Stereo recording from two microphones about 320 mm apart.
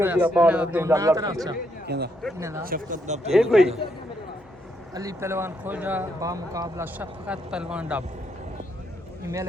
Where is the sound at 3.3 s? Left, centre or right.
Centre.